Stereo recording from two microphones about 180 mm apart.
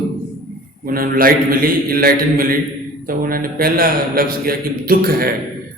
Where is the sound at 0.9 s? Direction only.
50° right (ahead or behind).